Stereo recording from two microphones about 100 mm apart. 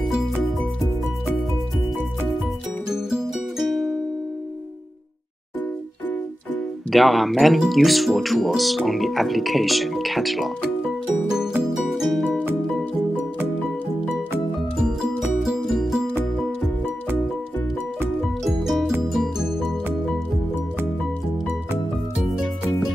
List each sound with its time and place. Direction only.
2.9 s music: 5° right (ahead or behind)
6.5 s speech: centre (ahead or behind)
11.3 s music: 5° right (ahead or behind)
12.3 s music: 20° right (ahead or behind)
14.8 s music: 5° right (ahead or behind)
18.4 s music: centre (ahead or behind)